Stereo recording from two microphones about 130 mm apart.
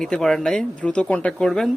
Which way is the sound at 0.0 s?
5° left (ahead or behind).